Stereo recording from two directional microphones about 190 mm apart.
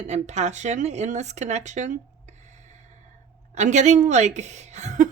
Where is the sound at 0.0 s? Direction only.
35° right (ahead or behind).